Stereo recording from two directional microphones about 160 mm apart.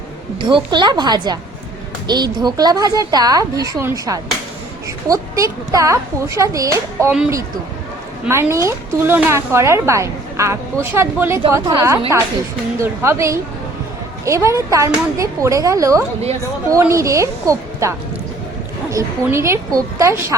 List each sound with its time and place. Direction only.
0.4 s a woman's voice: 30° right (ahead or behind)
8.3 s a woman's voice: 15° right (ahead or behind)